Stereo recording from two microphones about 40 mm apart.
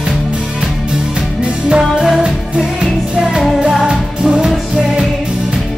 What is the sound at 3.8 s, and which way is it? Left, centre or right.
Music, centre.